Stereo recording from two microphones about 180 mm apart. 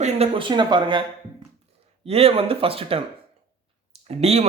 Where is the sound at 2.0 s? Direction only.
35° right (ahead or behind).